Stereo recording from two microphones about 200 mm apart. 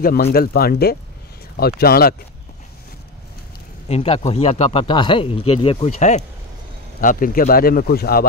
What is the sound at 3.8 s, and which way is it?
A man's voice, 30° left (ahead or behind).